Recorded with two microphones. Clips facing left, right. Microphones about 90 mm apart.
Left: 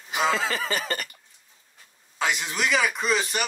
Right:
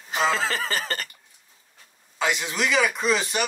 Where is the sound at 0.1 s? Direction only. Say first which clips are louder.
Right 1 dB; 35° right (ahead or behind).